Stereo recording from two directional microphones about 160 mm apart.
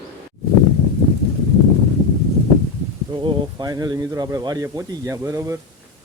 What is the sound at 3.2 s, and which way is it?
Speech, 25° right (ahead or behind).